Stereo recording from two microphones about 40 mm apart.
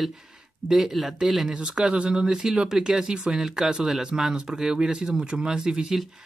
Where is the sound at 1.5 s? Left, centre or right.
Right.